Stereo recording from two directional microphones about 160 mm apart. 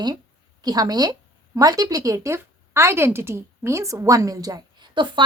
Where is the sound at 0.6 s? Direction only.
25° right (ahead or behind).